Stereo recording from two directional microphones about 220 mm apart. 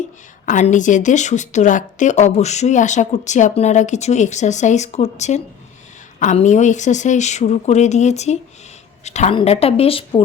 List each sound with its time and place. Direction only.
0.4 s a woman's voice: 35° left (ahead or behind)